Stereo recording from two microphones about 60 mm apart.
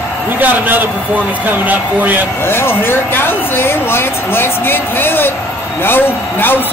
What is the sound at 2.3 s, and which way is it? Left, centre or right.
Speech, left.